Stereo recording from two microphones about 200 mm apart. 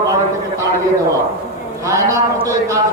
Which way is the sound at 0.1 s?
15° right (ahead or behind).